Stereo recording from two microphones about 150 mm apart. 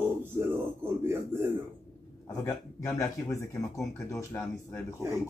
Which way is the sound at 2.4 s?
20° left (ahead or behind).